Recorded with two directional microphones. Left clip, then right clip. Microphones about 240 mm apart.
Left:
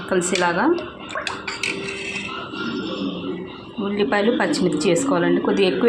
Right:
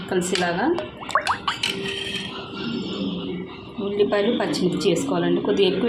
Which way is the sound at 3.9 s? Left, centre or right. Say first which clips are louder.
Left 1 dB; centre.